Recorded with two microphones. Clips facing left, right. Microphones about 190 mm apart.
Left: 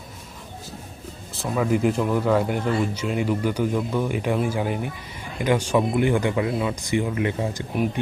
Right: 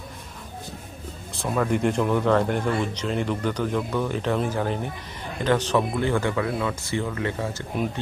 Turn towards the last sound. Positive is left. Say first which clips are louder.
# left 3 dB
turn(degrees=15)  # may be behind; listen again after turning